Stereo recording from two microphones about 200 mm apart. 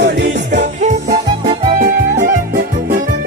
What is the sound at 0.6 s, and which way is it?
Music, 35° right (ahead or behind).